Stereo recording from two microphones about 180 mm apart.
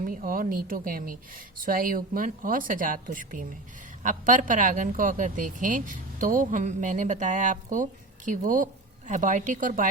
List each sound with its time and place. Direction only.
0.0 s speech: 50° right (ahead or behind)